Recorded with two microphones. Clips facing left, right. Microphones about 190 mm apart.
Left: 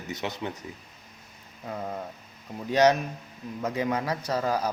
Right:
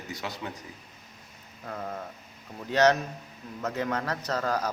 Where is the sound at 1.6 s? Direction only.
15° left (ahead or behind).